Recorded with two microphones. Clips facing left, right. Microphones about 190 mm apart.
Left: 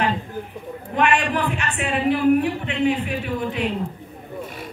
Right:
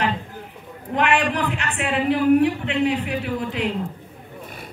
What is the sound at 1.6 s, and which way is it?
Speech, 75° right (ahead or behind).